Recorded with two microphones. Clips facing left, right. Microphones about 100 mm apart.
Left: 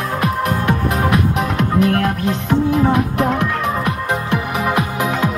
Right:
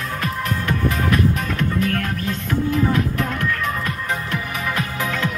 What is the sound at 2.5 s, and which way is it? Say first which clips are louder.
Speech: left 5 dB; 60° left (ahead or behind).